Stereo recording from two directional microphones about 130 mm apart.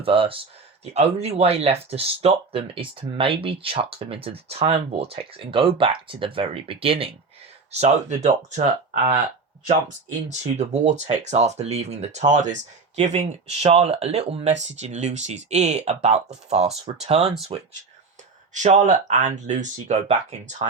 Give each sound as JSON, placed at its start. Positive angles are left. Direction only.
{"t": 0.0, "sound": "speech", "side_deg": -45}
{"t": 7.7, "sound": "speech", "side_deg": -55}
{"t": 13.0, "sound": "speech", "side_deg": -55}
{"t": 18.5, "sound": "speech", "side_deg": -70}